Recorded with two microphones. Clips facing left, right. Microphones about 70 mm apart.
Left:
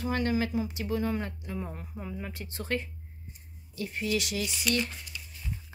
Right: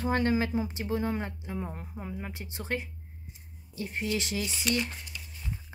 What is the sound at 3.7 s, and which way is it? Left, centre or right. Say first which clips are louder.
Speech: left 1 dB; right.